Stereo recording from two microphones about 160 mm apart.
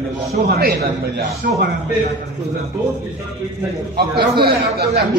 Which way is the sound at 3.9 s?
80° right.